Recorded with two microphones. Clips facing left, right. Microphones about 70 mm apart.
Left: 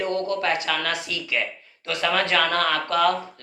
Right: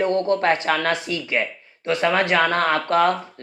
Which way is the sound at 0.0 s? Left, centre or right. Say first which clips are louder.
Right 5 dB; right.